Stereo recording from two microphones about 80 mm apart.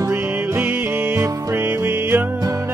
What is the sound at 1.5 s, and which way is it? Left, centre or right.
Music, right.